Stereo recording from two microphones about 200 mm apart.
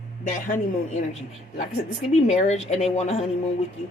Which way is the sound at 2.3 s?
35° left (ahead or behind).